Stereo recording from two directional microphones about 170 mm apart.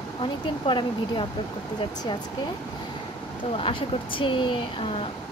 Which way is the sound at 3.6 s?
30° left (ahead or behind).